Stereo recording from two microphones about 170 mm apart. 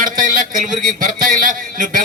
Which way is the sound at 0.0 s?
50° right (ahead or behind).